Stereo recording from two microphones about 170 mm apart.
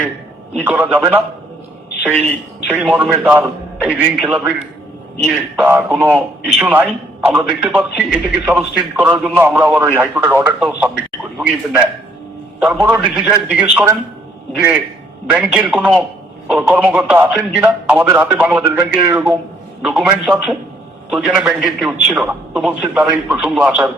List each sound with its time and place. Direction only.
0.6 s a man's voice: 10° right (ahead or behind)
2.1 s speech: 10° left (ahead or behind)
2.6 s a man's voice: 10° right (ahead or behind)
15.3 s a man's voice: 5° right (ahead or behind)